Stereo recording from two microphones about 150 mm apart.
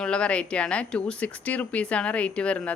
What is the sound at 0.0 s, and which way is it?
Speech, 5° left (ahead or behind).